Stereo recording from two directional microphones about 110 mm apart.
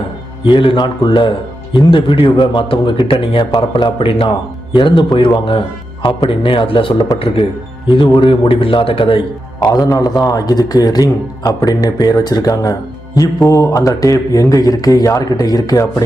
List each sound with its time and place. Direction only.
0.4 s speech: 50° left (ahead or behind)
9.6 s mantra: 35° left (ahead or behind)